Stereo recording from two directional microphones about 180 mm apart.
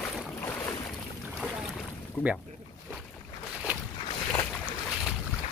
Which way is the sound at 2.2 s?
10° left (ahead or behind).